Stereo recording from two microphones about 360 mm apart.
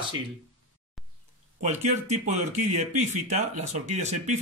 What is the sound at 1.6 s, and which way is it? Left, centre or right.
Speech, centre.